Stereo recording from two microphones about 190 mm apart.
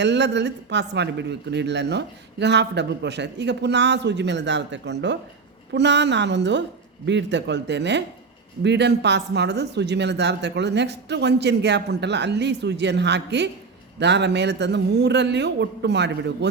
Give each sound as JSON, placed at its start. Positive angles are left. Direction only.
{"t": 0.0, "sound": "a man's voice", "side_deg": -65}